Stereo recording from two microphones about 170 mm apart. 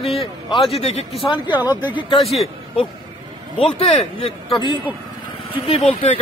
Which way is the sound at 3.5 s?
30° left (ahead or behind).